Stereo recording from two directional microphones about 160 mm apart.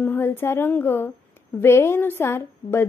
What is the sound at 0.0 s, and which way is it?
A woman's voice, 15° left (ahead or behind).